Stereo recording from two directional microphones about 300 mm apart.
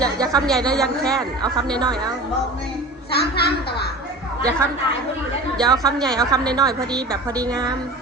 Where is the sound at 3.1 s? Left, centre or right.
Left.